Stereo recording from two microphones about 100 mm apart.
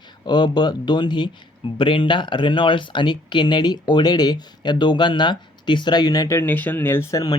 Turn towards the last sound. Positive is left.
turn(degrees=40)  # may be behind; listen again after turning